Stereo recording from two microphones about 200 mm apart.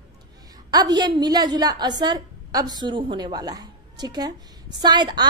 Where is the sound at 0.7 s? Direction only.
20° right (ahead or behind).